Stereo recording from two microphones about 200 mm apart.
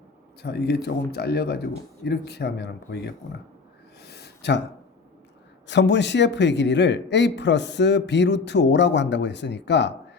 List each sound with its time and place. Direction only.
0.4 s a man's voice: 55° left (ahead or behind)
4.0 s a sound: 55° left (ahead or behind)
5.6 s a man's voice: 60° left (ahead or behind)